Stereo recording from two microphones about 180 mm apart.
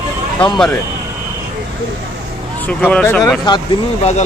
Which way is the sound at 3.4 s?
25° left (ahead or behind).